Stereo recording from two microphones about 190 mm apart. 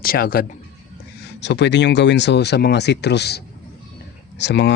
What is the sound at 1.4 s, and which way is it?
Speech, 65° left (ahead or behind).